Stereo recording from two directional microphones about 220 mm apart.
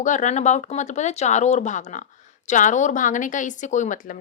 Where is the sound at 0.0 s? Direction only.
35° left (ahead or behind).